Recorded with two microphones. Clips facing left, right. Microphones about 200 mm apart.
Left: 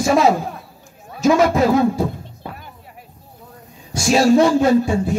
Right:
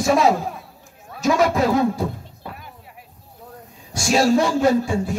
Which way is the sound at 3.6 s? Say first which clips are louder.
Left 5 dB; centre (ahead or behind).